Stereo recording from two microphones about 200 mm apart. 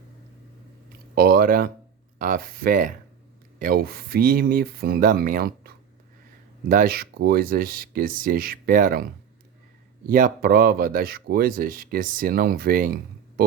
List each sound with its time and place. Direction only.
1.1 s speech: 50° right (ahead or behind)
10.1 s speech: 45° right (ahead or behind)